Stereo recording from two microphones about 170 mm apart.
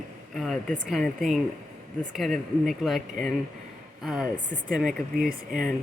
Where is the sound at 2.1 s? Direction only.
Centre (ahead or behind).